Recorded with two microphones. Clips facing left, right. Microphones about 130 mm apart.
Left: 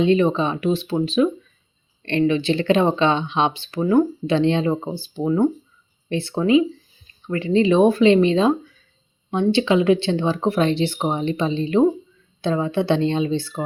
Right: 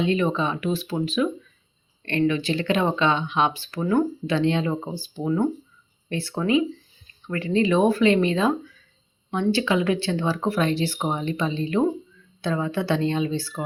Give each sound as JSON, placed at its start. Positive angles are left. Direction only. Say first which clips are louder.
{"t": 0.0, "sound": "speech", "louder": "left 5 dB", "side_deg": 25}